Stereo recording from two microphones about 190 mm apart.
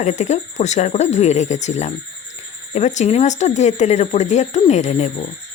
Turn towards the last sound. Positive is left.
turn(degrees=35)  # may be behind; listen again after turning